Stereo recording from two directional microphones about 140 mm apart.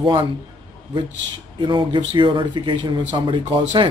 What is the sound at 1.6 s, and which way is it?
Speech, 35° right (ahead or behind).